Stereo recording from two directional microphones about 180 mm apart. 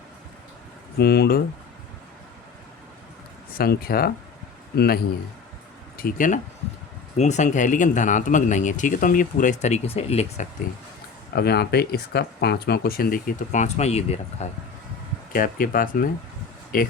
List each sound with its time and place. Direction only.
0.9 s speech: 60° left (ahead or behind)
3.6 s speech: 55° left (ahead or behind)
6.0 s a man's voice: 50° left (ahead or behind)
11.3 s speech: 65° left (ahead or behind); by 14.6 s 40° left (ahead or behind)
15.3 s a man's voice: 50° left (ahead or behind)